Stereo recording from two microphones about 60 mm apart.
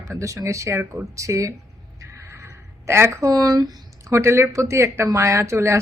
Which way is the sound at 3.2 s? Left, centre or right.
Right.